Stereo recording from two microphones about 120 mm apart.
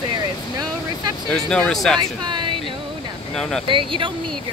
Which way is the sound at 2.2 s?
40° right (ahead or behind).